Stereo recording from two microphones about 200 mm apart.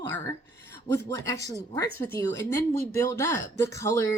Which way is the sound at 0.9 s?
15° left (ahead or behind).